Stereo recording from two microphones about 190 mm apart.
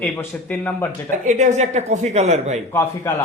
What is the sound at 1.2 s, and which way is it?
Speech, 40° right (ahead or behind).